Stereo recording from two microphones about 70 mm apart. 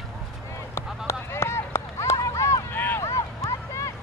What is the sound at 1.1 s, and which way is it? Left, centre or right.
Run, left.